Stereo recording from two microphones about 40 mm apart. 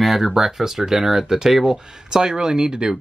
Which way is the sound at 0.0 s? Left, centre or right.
Centre.